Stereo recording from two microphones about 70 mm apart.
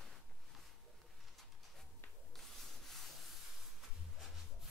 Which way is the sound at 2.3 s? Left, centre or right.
Centre.